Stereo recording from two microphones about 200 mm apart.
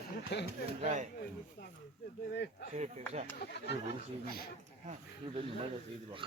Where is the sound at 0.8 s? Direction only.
35° right (ahead or behind).